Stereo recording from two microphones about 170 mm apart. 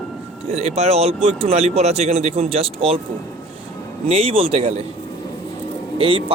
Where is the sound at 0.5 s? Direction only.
40° right (ahead or behind).